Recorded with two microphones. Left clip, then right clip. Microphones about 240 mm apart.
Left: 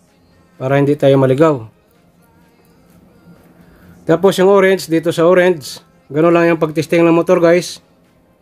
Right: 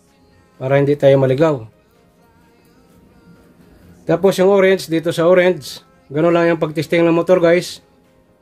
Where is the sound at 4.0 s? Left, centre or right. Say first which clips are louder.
Left 2 dB; left.